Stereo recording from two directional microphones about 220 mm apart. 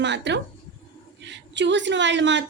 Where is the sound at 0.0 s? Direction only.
55° right (ahead or behind).